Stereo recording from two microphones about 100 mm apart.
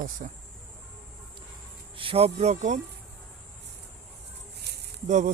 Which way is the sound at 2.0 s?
75° right (ahead or behind).